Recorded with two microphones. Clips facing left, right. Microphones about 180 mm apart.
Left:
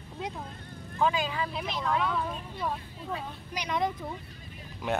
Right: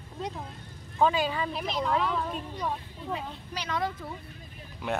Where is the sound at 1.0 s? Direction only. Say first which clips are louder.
Right 3 dB; 35° right (ahead or behind).